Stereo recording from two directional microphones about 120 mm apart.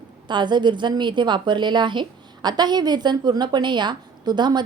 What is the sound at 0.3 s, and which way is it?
A woman's voice, 40° right (ahead or behind).